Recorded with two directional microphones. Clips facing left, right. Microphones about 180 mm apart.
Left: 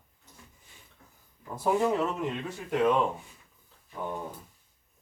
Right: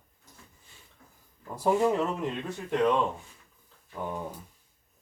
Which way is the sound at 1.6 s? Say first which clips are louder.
Right 1 dB; centre (ahead or behind).